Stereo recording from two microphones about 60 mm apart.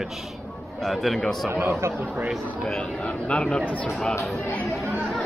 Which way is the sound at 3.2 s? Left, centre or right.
Centre.